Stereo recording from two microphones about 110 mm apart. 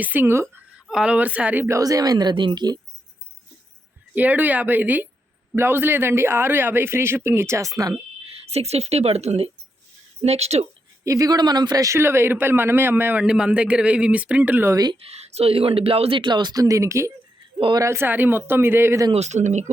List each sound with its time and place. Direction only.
0.0 s a man's voice: 15° right (ahead or behind)
0.4 s speech: 5° right (ahead or behind)
1.6 s speech: 30° right (ahead or behind)
4.1 s a man's voice: 15° right (ahead or behind); by 7.9 s 30° right (ahead or behind)
8.3 s a woman's voice: 70° right (ahead or behind)
11.0 s a man's voice: 30° right (ahead or behind)
13.2 s speech: 10° right (ahead or behind)
14.9 s speech: 70° right (ahead or behind); by 17.1 s 25° right (ahead or behind)
17.6 s speech: 45° right (ahead or behind)
17.8 s a man's voice: 20° right (ahead or behind)
19.1 s speech: 90° right